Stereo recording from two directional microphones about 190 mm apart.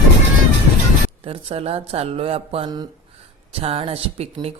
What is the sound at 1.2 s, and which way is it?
Speech, 30° right (ahead or behind).